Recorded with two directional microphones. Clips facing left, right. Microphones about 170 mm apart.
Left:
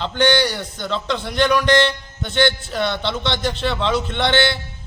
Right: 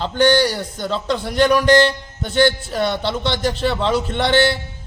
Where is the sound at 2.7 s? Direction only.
10° right (ahead or behind).